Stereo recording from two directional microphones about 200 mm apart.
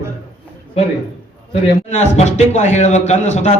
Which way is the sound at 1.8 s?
35° left (ahead or behind).